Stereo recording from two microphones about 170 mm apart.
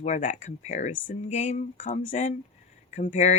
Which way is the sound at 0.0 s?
45° left (ahead or behind).